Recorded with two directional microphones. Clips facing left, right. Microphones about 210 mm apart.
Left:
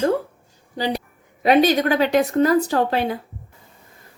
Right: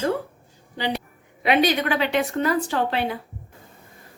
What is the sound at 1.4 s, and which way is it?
A woman's voice, 40° left (ahead or behind).